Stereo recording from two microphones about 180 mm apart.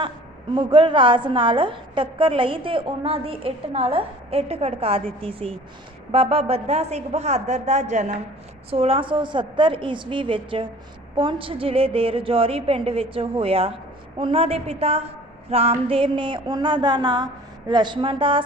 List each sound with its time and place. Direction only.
0.5 s a woman's voice: 25° right (ahead or behind)